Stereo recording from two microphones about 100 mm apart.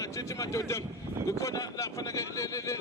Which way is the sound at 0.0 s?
30° left (ahead or behind).